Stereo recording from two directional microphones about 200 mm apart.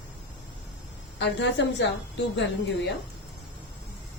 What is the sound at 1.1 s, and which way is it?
Speech, 60° left (ahead or behind).